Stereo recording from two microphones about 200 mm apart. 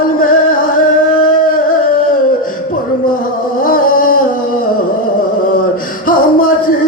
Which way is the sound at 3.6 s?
45° left (ahead or behind).